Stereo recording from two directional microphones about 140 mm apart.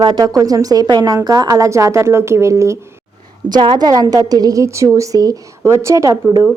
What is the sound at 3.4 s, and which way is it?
A woman's voice, 35° right (ahead or behind).